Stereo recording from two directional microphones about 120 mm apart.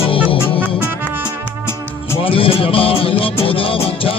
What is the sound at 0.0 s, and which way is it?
Music, 50° left (ahead or behind).